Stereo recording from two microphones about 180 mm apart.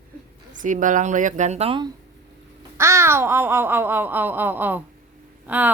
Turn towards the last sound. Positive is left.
turn(degrees=-10)  # may be behind; listen again after turning